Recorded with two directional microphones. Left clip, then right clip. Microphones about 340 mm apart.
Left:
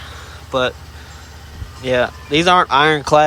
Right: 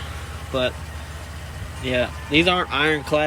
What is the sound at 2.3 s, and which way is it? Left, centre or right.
Speech, centre.